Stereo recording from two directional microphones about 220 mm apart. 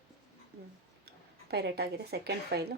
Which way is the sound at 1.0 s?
45° right (ahead or behind).